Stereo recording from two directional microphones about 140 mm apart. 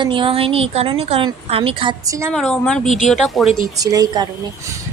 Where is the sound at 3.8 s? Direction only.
25° right (ahead or behind).